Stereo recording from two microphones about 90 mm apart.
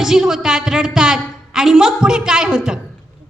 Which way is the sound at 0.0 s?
5° right (ahead or behind).